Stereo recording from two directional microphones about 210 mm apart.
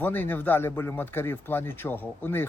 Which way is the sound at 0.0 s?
10° left (ahead or behind).